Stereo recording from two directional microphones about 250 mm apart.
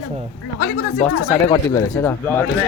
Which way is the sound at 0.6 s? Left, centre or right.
Left.